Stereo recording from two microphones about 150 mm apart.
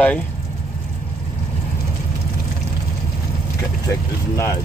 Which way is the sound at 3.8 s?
20° left (ahead or behind).